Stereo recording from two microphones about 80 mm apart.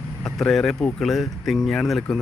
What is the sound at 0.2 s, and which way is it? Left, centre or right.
Speech, centre.